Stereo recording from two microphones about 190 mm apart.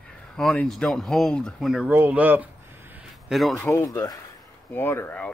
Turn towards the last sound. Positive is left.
turn(degrees=10)  # may be behind; listen again after turning